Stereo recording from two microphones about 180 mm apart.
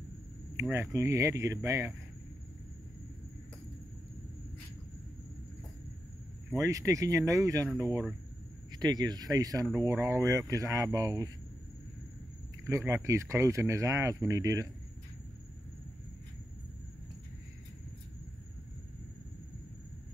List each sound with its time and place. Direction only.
0.6 s speech: 15° right (ahead or behind)
6.5 s speech: 15° right (ahead or behind)
8.7 s speech: 20° right (ahead or behind)
12.6 s speech: 15° right (ahead or behind)